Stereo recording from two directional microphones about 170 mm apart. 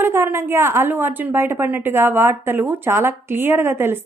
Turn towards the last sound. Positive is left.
turn(degrees=-15)  # may be behind; listen again after turning